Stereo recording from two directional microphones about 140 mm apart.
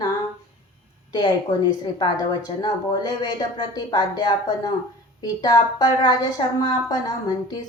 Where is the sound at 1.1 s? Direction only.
35° left (ahead or behind).